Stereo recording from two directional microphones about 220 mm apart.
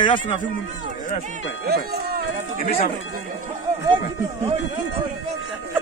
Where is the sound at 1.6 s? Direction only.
45° right (ahead or behind).